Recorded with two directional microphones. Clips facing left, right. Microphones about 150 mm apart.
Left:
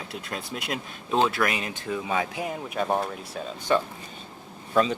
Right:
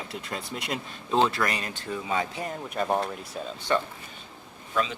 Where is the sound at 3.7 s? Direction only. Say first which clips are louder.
Left 2 dB; 15° left (ahead or behind).